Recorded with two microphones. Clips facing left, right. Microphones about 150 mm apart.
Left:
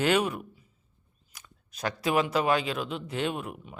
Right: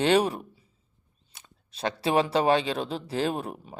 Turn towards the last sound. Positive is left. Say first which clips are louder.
# right 3 dB
turn(degrees=-35)  # may be behind; listen again after turning